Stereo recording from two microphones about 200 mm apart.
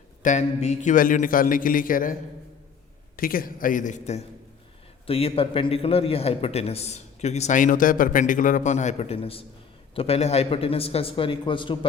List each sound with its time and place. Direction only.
0.2 s a man's voice: 35° left (ahead or behind)
3.2 s a man's voice: 45° left (ahead or behind); by 11.9 s 25° left (ahead or behind)